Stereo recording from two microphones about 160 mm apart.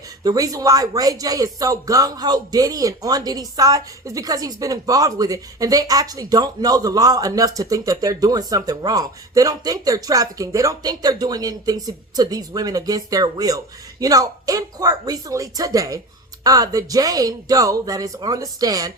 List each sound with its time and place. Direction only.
0.3 s speech: 20° right (ahead or behind)